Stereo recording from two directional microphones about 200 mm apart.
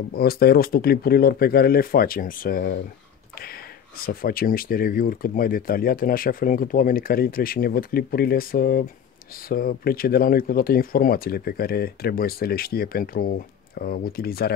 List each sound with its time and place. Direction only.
0.1 s speech: 50° left (ahead or behind)